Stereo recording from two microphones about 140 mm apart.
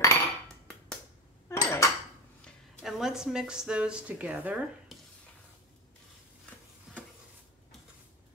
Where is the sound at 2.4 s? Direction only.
Centre (ahead or behind).